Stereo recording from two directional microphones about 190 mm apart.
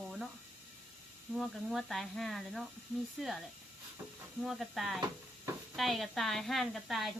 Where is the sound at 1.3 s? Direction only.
Centre (ahead or behind).